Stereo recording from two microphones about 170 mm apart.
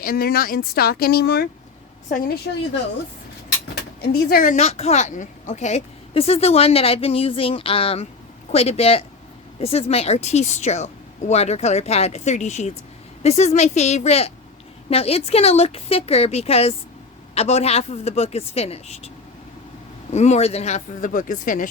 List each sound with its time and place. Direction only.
0.0 s speech: 60° left (ahead or behind)
2.0 s speech: 50° left (ahead or behind)
4.0 s speech: 65° left (ahead or behind)
4.5 s a woman's voice: 40° left (ahead or behind)